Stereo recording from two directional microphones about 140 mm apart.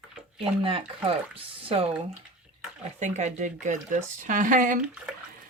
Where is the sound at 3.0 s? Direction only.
60° right (ahead or behind).